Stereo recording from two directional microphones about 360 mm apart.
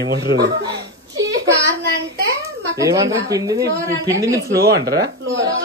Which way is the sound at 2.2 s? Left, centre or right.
Right.